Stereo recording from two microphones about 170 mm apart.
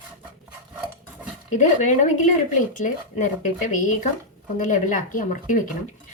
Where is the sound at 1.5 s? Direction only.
45° left (ahead or behind).